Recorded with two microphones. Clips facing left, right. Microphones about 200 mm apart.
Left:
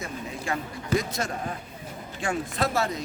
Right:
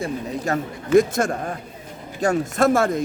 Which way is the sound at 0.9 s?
50° right (ahead or behind).